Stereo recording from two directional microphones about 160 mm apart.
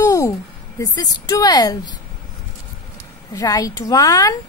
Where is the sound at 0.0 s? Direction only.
20° left (ahead or behind).